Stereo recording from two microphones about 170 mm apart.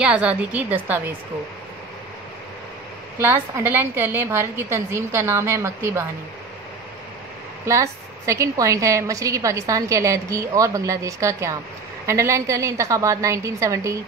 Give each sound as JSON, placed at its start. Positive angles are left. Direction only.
{"t": 0.0, "sound": "a woman's voice", "side_deg": -5}
{"t": 3.2, "sound": "a woman's voice", "side_deg": -10}
{"t": 7.6, "sound": "a woman's voice", "side_deg": -15}